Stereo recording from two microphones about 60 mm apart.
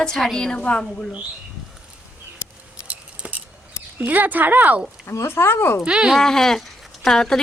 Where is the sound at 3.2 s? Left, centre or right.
Right.